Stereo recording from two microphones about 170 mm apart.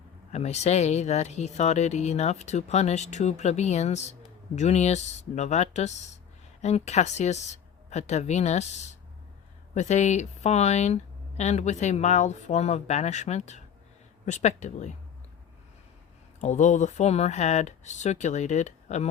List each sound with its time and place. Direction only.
0.3 s speech: 40° left (ahead or behind)
16.4 s speech: 45° left (ahead or behind)